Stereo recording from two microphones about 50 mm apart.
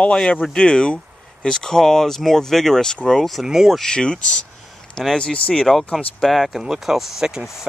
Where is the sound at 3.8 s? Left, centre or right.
Centre.